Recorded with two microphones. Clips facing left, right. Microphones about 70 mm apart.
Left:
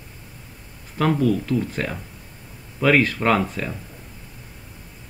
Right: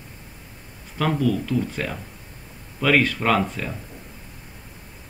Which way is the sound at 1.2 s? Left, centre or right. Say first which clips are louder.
Left 2 dB; centre.